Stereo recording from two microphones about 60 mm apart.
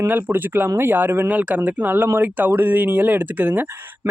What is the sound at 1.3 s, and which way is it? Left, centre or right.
Speech, right.